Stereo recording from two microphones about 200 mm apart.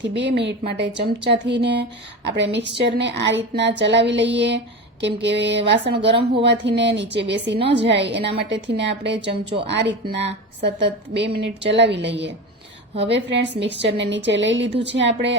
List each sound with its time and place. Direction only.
0.0 s a woman's voice: 60° right (ahead or behind)